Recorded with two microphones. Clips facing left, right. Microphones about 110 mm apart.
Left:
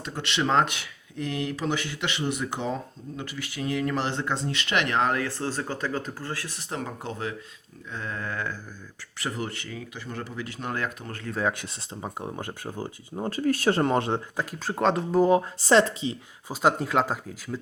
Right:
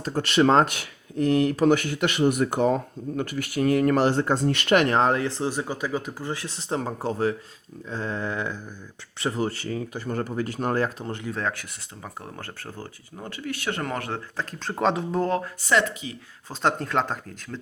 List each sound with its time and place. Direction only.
0.0 s speech: 45° right (ahead or behind)
7.9 s a sound: 30° right (ahead or behind)
9.2 s speech: 30° right (ahead or behind)
11.3 s speech: 5° left (ahead or behind)
12.0 s speech: 15° left (ahead or behind)
13.2 s speech: 40° left (ahead or behind); by 14.4 s 20° left (ahead or behind)
14.6 s speech: centre (ahead or behind)
15.6 s speech: 30° left (ahead or behind)
16.5 s speech: 5° left (ahead or behind)